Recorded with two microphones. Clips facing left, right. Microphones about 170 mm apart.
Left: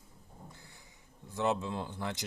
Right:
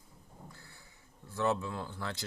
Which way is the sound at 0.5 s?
15° left (ahead or behind).